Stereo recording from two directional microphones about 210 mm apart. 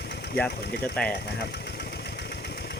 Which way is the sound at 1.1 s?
50° left (ahead or behind).